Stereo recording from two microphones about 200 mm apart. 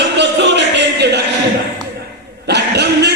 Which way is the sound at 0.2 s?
60° right (ahead or behind).